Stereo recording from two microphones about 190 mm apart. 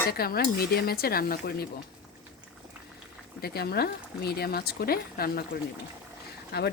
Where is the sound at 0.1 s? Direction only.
55° left (ahead or behind).